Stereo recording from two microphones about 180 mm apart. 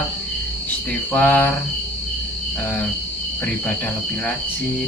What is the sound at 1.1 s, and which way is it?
Cricket, 10° left (ahead or behind).